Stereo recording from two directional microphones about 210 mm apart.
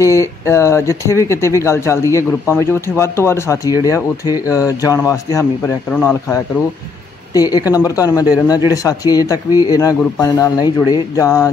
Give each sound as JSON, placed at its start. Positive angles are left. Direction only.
{"t": 0.0, "sound": "speech", "side_deg": 15}